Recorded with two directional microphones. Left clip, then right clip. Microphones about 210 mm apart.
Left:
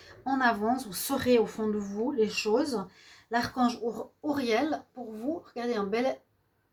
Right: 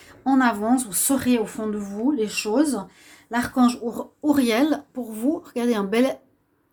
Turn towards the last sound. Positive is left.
turn(degrees=-55)  # may be behind; listen again after turning